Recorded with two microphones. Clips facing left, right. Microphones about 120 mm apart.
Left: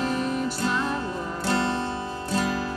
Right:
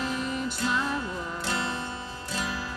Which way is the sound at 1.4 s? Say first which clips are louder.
Left 8 dB; 35° left (ahead or behind).